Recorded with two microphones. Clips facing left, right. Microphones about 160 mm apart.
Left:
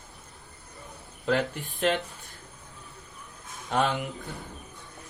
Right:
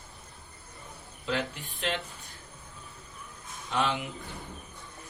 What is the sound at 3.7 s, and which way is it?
Speech, 45° left (ahead or behind).